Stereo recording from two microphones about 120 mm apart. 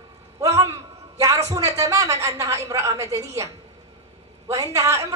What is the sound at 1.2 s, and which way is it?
A woman's voice, 25° right (ahead or behind).